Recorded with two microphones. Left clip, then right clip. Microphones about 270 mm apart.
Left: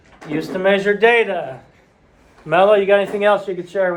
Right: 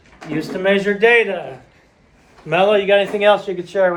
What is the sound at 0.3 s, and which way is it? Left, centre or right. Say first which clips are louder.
Speech: left 1 dB; left.